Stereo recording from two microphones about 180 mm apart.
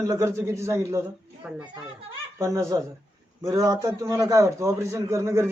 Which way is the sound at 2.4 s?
15° right (ahead or behind).